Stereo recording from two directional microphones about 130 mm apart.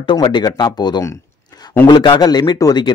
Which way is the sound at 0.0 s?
35° left (ahead or behind).